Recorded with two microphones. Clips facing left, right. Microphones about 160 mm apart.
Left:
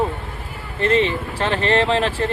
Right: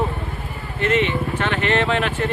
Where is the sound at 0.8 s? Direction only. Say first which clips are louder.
Left 1 dB; 35° left (ahead or behind).